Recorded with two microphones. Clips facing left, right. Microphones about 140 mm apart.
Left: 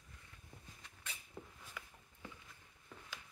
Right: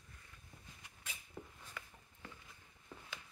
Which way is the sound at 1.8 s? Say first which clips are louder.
Right 1 dB; 5° left (ahead or behind).